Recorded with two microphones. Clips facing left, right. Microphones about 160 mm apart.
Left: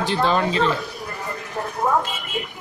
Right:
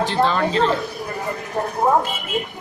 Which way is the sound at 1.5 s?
40° right (ahead or behind).